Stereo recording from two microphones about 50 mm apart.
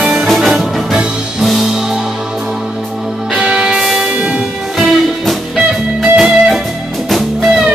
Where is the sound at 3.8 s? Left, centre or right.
Centre.